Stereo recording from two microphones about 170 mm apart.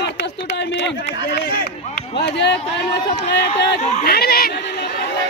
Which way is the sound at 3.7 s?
40° left (ahead or behind).